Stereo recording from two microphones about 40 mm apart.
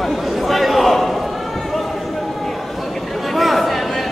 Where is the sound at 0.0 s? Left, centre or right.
Centre.